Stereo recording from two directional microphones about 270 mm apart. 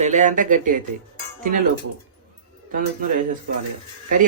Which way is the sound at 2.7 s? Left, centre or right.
Right.